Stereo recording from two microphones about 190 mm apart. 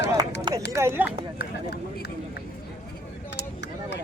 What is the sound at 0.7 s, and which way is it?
Speech, 15° right (ahead or behind).